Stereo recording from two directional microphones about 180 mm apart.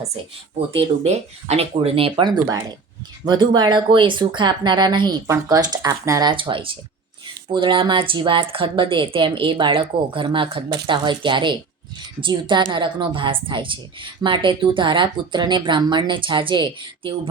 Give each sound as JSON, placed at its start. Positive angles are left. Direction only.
{"t": 0.7, "sound": "a woman's voice", "side_deg": -35}